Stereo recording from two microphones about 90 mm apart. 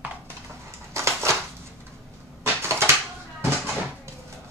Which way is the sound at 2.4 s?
25° right (ahead or behind).